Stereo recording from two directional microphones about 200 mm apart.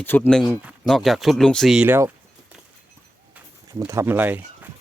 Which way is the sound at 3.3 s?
15° right (ahead or behind).